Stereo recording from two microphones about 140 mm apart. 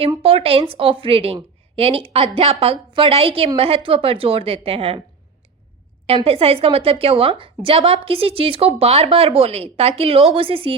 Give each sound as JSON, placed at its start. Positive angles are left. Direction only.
{"t": 0.2, "sound": "a woman's voice", "side_deg": -40}
{"t": 6.2, "sound": "a woman's voice", "side_deg": -45}